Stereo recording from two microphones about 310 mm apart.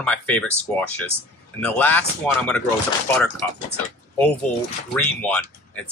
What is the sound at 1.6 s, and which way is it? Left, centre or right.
Speech, centre.